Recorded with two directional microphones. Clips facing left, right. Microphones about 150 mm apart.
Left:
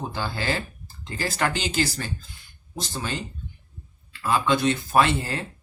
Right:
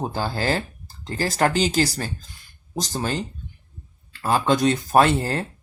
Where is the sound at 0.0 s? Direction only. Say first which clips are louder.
Right 4 dB; 40° right (ahead or behind).